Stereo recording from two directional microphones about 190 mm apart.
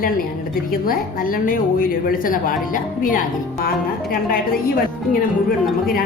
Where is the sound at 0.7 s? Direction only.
50° left (ahead or behind).